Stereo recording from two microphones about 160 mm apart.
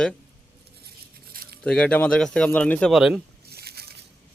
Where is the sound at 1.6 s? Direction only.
5° left (ahead or behind).